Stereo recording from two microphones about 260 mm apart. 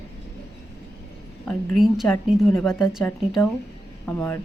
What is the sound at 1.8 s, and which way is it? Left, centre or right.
Speech, centre.